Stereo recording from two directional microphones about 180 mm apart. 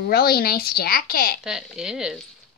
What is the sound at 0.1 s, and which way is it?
A woman's voice, 60° left (ahead or behind).